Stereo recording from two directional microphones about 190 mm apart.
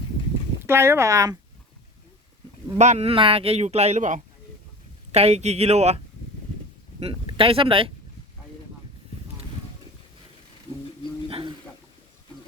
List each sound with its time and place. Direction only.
0.6 s speech: 15° right (ahead or behind)
2.7 s a man's voice: 40° right (ahead or behind)
7.0 s speech: 30° right (ahead or behind)
11.3 s a sound: 30° right (ahead or behind)